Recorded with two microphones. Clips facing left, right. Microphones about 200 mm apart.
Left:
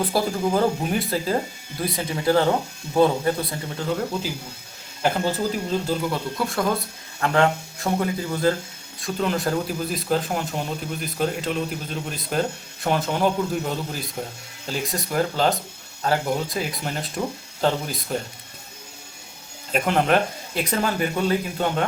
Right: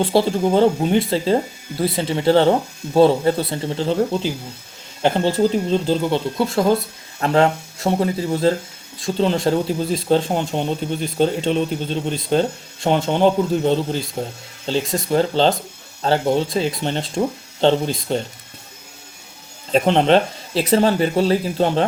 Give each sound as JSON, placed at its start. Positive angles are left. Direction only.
{"t": 0.0, "sound": "speech", "side_deg": -25}
{"t": 19.7, "sound": "speech", "side_deg": -25}